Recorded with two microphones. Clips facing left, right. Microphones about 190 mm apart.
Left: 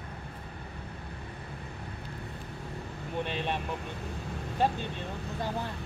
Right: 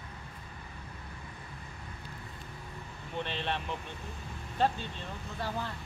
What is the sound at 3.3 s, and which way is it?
Vehicle, 10° left (ahead or behind).